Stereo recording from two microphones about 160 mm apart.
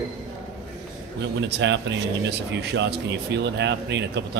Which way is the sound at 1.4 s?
90° right.